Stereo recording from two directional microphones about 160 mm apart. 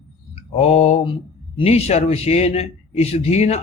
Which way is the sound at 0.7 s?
40° left (ahead or behind).